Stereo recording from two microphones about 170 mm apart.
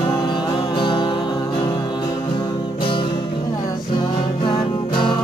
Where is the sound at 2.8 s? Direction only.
30° left (ahead or behind).